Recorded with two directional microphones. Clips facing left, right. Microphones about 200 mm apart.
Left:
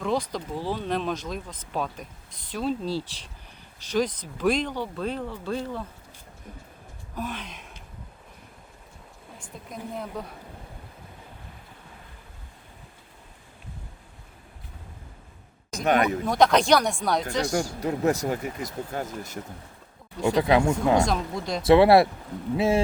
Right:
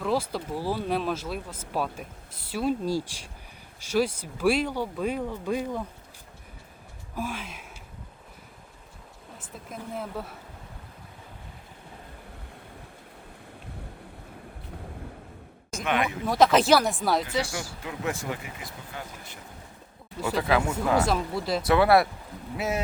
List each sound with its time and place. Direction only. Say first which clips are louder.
0.0 s speech: even; 5° right (ahead or behind)
7.2 s speech: even; 10° right (ahead or behind)
9.4 s speech: left 2 dB; 5° right (ahead or behind)
15.7 s a sound: left 5 dB; 40° left (ahead or behind)
16.0 s speech: left 1 dB; centre (ahead or behind)
17.5 s speech: left 9 dB; 40° left (ahead or behind)
20.2 s speech: left 5 dB; 25° left (ahead or behind)
21.0 s speech: even; 5° right (ahead or behind)
21.6 s speech: left 5 dB; 25° left (ahead or behind)